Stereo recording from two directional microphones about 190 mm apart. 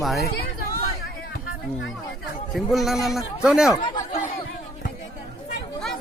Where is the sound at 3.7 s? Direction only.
25° left (ahead or behind).